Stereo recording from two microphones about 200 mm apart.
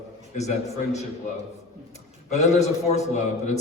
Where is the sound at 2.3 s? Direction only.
35° left (ahead or behind).